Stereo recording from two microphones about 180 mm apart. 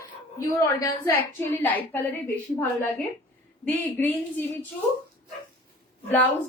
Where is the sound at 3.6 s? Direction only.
10° left (ahead or behind).